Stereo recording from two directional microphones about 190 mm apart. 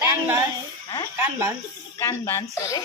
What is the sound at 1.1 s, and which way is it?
Speech, 15° right (ahead or behind).